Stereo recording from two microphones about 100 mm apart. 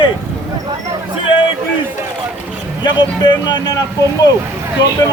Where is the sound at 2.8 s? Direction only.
45° left (ahead or behind).